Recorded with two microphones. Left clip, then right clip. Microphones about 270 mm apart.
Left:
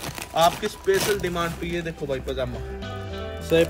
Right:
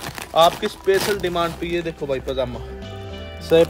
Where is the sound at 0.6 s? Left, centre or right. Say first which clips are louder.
Right 3 dB; right.